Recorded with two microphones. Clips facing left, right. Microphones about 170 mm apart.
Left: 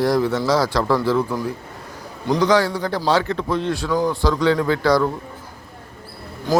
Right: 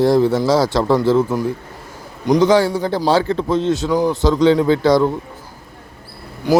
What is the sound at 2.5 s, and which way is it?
Speech, 25° right (ahead or behind).